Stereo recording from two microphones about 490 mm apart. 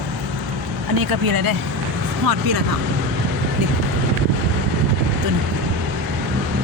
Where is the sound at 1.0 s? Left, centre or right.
Right.